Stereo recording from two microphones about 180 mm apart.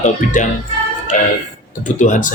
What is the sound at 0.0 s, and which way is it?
Speech, 45° left (ahead or behind).